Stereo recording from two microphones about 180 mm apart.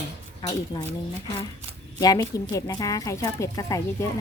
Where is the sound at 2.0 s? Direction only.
20° left (ahead or behind).